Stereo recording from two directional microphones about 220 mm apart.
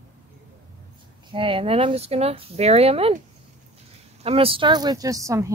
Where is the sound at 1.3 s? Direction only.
25° right (ahead or behind).